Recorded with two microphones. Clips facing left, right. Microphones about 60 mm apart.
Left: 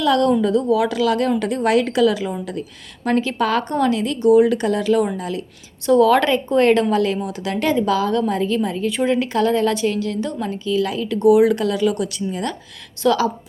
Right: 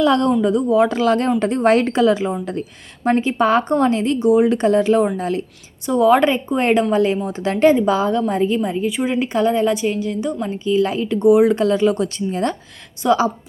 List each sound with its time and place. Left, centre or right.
0.0 s a woman's voice: right
5.8 s a woman's voice: centre
9.1 s a woman's voice: right
13.0 s a woman's voice: right